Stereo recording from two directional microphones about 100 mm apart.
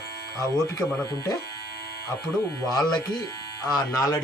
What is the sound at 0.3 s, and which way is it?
Speech, 35° left (ahead or behind).